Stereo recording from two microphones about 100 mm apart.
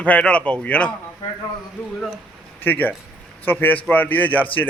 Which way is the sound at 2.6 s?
20° left (ahead or behind).